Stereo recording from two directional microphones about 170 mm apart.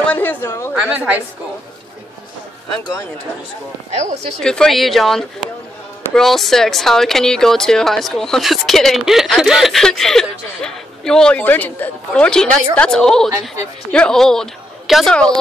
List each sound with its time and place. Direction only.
0.0 s a sound: 10° left (ahead or behind)
0.7 s a woman's voice: 10° right (ahead or behind)
4.4 s a man's voice: 5° left (ahead or behind)